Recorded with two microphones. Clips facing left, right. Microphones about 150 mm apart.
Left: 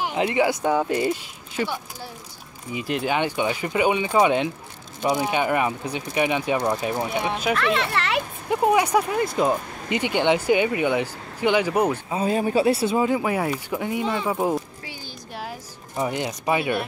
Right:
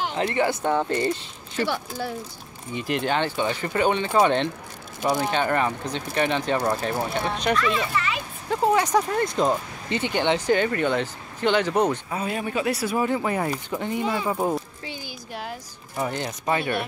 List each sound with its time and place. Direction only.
0.0 s speech: 10° left (ahead or behind)
2.7 s speech: 5° left (ahead or behind)
7.5 s a child's voice: 65° left (ahead or behind)
8.5 s speech: 15° left (ahead or behind)
12.1 s speech: 30° left (ahead or behind); by 14.0 s 10° left (ahead or behind)
14.0 s speech: 5° right (ahead or behind)
16.0 s speech: 15° left (ahead or behind)